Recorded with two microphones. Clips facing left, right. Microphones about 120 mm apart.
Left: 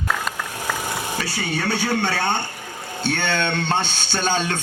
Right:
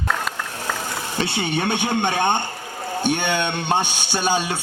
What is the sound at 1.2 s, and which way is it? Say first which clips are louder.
A man's voice: right 6 dB; 20° right (ahead or behind).